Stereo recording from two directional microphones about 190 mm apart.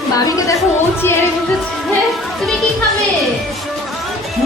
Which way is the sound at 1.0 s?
10° left (ahead or behind).